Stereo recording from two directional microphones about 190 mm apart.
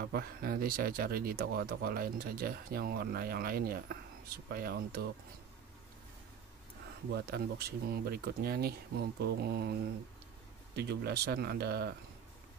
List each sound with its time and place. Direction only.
0.0 s speech: 55° right (ahead or behind)
7.2 s speech: 55° right (ahead or behind)
10.8 s speech: 60° right (ahead or behind)